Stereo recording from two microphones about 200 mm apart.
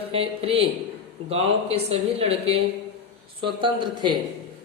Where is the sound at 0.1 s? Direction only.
30° right (ahead or behind).